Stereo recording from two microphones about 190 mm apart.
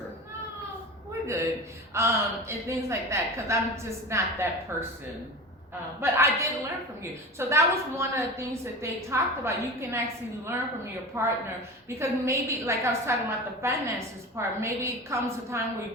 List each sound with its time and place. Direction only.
1.3 s a woman's voice: 15° right (ahead or behind)
6.0 s a woman's voice: 15° right (ahead or behind)
11.1 s a woman's voice: 15° right (ahead or behind)